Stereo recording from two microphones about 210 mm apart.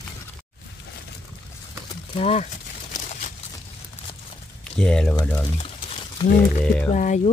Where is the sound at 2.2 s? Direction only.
30° left (ahead or behind).